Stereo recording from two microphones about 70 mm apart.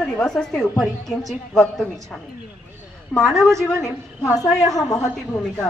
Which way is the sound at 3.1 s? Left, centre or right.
Centre.